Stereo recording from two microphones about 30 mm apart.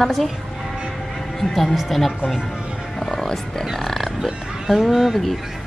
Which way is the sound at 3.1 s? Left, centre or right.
Centre.